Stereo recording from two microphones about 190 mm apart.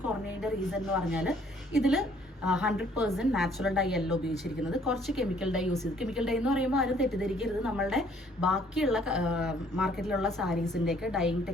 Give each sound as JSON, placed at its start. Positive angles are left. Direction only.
{"t": 0.1, "sound": "a woman's voice", "side_deg": -5}